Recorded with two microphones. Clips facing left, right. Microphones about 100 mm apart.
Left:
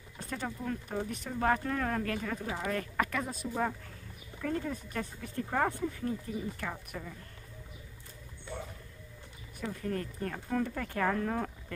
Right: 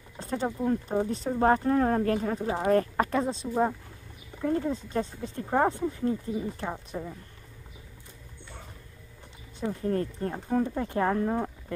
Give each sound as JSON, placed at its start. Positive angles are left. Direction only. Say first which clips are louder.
{"t": 0.2, "sound": "a sound", "louder": "right 8 dB", "side_deg": -30}
{"t": 0.5, "sound": "speech", "louder": "right 9 dB", "side_deg": -30}
{"t": 9.6, "sound": "speech", "louder": "right 7 dB", "side_deg": -30}